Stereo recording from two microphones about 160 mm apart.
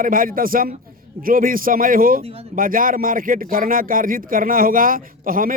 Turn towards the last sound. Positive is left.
turn(degrees=-60)  # may be behind; listen again after turning